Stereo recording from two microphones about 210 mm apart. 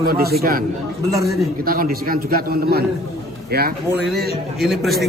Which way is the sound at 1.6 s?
45° right (ahead or behind).